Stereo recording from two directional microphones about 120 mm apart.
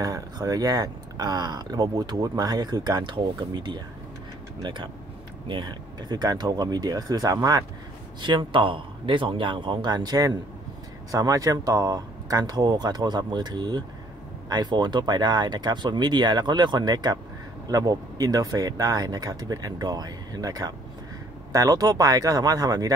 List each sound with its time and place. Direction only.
0.0 s speech: 30° right (ahead or behind)
5.5 s speech: 40° right (ahead or behind)
8.2 s speech: 40° right (ahead or behind)